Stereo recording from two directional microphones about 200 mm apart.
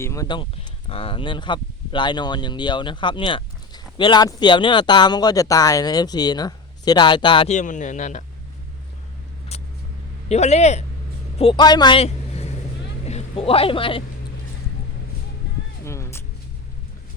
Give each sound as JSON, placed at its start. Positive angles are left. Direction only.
{"t": 0.0, "sound": "speech", "side_deg": 15}
{"t": 7.5, "sound": "a man's voice", "side_deg": 40}
{"t": 9.5, "sound": "vehicle", "side_deg": 30}
{"t": 10.2, "sound": "a man's voice", "side_deg": 35}
{"t": 15.8, "sound": "a sound", "side_deg": 15}